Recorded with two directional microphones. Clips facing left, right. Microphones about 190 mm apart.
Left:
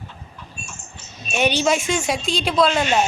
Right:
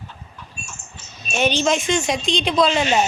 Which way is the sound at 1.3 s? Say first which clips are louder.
Even; 10° left (ahead or behind).